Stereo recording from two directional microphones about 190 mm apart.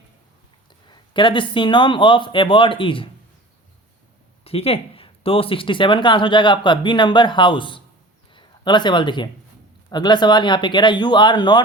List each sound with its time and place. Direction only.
0.9 s speech: 25° left (ahead or behind)
4.4 s a man's voice: 30° left (ahead or behind)